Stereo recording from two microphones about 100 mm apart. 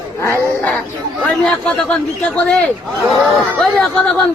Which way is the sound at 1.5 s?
10° left (ahead or behind).